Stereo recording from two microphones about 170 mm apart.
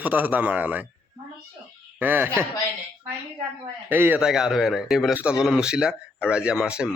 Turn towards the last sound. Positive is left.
turn(degrees=-5)  # may be behind; listen again after turning